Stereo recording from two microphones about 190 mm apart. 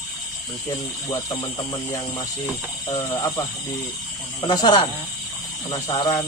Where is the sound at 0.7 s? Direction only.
20° left (ahead or behind).